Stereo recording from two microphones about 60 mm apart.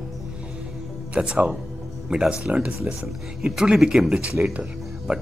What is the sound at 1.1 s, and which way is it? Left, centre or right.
Speech, centre.